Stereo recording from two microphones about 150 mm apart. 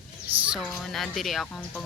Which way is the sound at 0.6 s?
5° left (ahead or behind).